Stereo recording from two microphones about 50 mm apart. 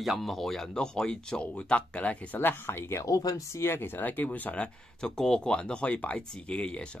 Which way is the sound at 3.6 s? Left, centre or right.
Left.